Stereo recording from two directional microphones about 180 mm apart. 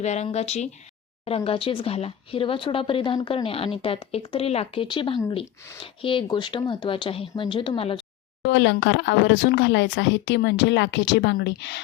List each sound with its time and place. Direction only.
0.0 s speech: 40° left (ahead or behind)
8.4 s speech: 80° left